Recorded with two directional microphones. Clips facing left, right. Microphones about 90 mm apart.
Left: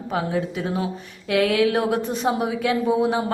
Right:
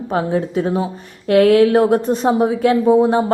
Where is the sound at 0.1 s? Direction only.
40° right (ahead or behind).